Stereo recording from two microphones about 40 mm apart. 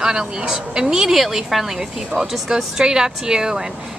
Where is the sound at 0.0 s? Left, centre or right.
Centre.